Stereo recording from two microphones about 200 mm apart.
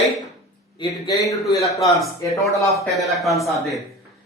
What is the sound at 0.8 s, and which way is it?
Speech, 20° left (ahead or behind).